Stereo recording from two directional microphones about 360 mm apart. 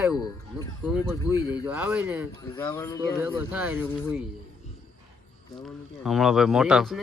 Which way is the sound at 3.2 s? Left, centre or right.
Centre.